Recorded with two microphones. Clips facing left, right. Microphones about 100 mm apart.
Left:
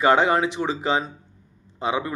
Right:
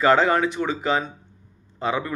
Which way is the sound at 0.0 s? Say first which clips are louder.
Even; 20° left (ahead or behind).